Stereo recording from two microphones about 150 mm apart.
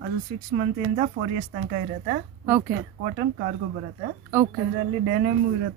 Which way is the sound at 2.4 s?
15° right (ahead or behind).